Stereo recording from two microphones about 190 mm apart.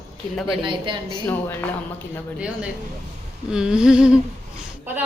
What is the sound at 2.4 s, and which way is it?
Speech, 5° right (ahead or behind).